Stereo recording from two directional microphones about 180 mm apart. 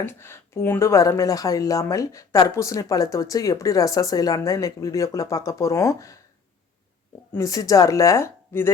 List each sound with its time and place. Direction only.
0.0 s speech: 15° left (ahead or behind)
7.3 s speech: 20° left (ahead or behind)